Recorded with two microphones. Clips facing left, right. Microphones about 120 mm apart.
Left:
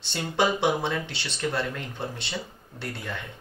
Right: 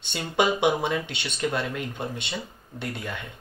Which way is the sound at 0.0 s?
15° right (ahead or behind).